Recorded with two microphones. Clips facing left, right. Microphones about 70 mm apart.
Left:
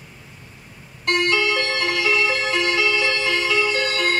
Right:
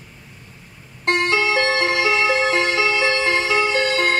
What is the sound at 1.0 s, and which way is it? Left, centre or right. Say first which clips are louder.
Music: right 1 dB; right.